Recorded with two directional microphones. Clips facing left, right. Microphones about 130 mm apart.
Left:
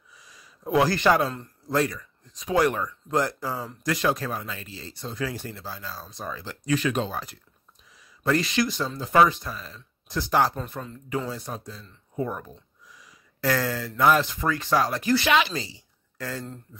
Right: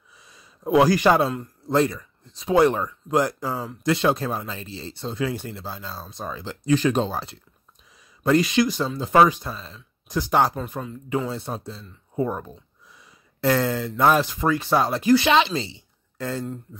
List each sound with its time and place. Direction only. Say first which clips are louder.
0.1 s a sound: right 1 dB; 25° right (ahead or behind)
1.7 s speech: right 4 dB; 25° right (ahead or behind)
3.1 s speech: right 4 dB; 15° right (ahead or behind)
8.2 s speech: right 5 dB; 20° right (ahead or behind)
11.2 s speech: right 4 dB; 25° right (ahead or behind)